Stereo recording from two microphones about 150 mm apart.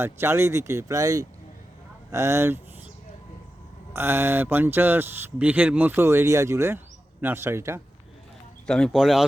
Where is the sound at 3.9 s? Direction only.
15° right (ahead or behind).